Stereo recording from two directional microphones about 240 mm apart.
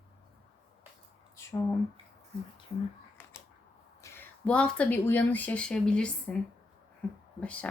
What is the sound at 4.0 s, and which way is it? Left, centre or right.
Speech, centre.